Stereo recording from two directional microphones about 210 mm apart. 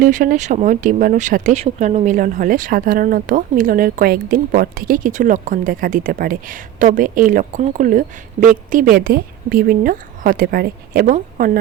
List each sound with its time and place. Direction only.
0.0 s a woman's voice: 40° right (ahead or behind)